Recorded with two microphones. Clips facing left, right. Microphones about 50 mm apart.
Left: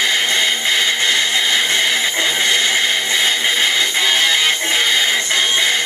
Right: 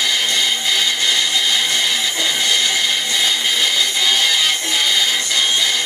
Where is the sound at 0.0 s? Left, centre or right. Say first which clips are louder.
Left 2 dB; left.